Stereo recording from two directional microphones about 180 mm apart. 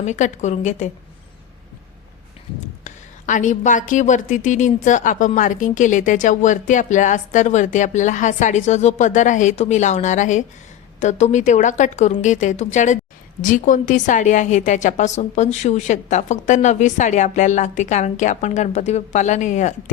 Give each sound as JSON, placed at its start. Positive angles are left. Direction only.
{"t": 0.0, "sound": "a woman's voice", "side_deg": 40}
{"t": 2.8, "sound": "a woman's voice", "side_deg": 45}